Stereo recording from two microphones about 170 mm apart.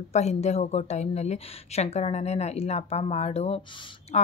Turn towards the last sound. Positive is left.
turn(degrees=40)  # may be behind; listen again after turning